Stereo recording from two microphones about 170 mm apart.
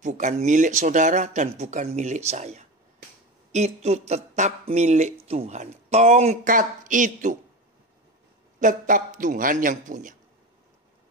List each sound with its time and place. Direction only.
0.0 s speech: 45° right (ahead or behind)
8.5 s speech: 50° right (ahead or behind)